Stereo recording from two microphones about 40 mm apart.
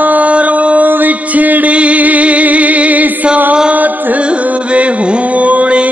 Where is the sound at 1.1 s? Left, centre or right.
Right.